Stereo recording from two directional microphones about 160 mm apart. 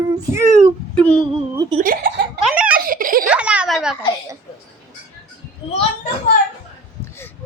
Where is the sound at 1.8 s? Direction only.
60° right (ahead or behind).